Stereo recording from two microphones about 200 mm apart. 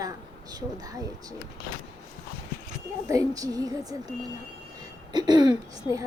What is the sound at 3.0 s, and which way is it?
Speech, 15° right (ahead or behind).